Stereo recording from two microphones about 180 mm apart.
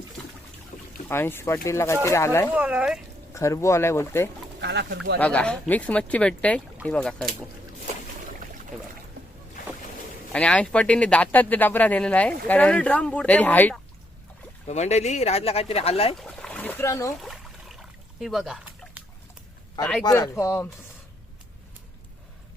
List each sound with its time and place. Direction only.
1.0 s speech: 10° left (ahead or behind)
2.5 s speech: 5° right (ahead or behind)
3.3 s speech: 15° left (ahead or behind)
4.6 s speech: 70° right (ahead or behind)
5.2 s speech: 5° left (ahead or behind)
10.3 s speech: 5° left (ahead or behind)
14.7 s speech: 40° left (ahead or behind)
16.1 s a sound: 5° left (ahead or behind)
17.2 s a sound: centre (ahead or behind)
19.8 s speech: 5° left (ahead or behind)
20.1 s speech: 20° left (ahead or behind)